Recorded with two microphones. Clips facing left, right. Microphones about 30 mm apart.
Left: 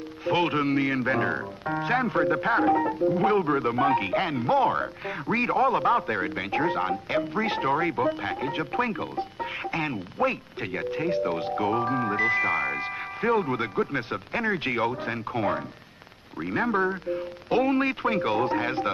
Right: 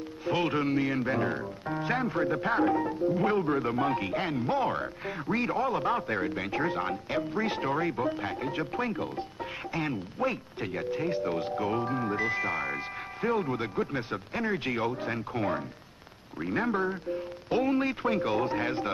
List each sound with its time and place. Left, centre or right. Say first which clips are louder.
0.2 s speech: left 4 dB; left
16.7 s speech: left 4 dB; left